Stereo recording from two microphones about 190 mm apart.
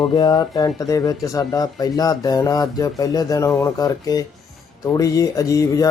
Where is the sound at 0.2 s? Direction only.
20° left (ahead or behind).